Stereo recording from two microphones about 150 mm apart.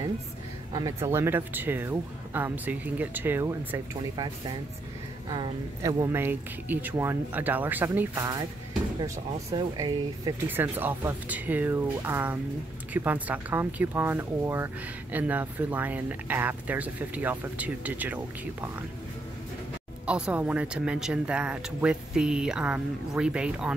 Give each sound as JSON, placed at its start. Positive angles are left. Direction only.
{"t": 0.7, "sound": "speech", "side_deg": -25}
{"t": 8.1, "sound": "speech", "side_deg": -25}
{"t": 10.5, "sound": "speech", "side_deg": -15}
{"t": 20.1, "sound": "speech", "side_deg": -5}